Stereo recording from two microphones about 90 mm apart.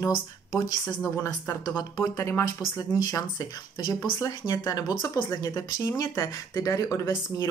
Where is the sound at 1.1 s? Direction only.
30° left (ahead or behind).